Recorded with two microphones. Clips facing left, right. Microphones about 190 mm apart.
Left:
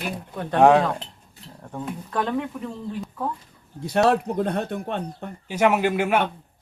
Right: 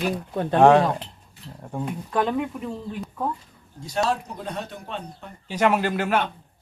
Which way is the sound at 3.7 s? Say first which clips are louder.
Left 5 dB; 60° left (ahead or behind).